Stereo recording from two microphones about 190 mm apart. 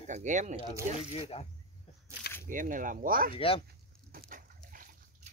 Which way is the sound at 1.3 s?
30° left (ahead or behind).